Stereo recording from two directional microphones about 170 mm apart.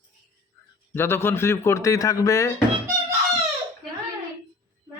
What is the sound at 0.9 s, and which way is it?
A man's voice, 15° left (ahead or behind).